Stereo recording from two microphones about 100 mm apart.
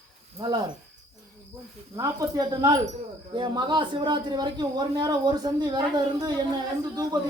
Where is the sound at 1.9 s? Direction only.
40° right (ahead or behind).